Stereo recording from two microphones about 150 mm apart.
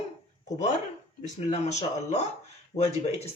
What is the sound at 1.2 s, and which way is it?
Speech, 50° left (ahead or behind).